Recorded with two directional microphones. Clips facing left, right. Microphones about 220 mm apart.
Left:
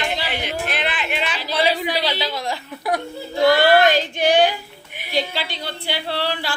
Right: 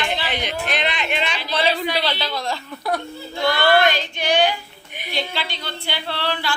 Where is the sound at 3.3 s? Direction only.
40° left (ahead or behind).